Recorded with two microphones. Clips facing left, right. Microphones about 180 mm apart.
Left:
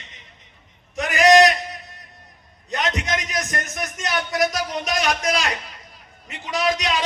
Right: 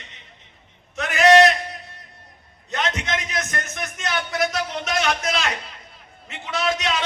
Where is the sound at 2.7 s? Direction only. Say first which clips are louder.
Left 1 dB; 20° left (ahead or behind).